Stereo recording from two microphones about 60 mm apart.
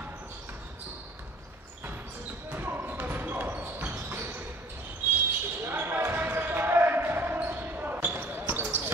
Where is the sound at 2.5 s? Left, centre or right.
Right.